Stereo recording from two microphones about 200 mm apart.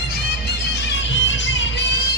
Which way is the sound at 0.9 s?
65° left (ahead or behind).